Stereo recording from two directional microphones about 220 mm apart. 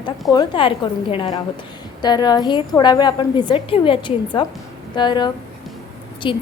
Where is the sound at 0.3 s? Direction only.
20° left (ahead or behind).